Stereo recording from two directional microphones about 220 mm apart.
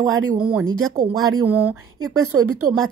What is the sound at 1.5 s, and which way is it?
Speech, 5° right (ahead or behind).